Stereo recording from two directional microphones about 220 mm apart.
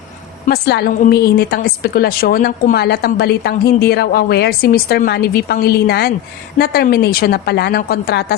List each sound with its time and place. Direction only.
0.4 s a woman's voice: 45° left (ahead or behind)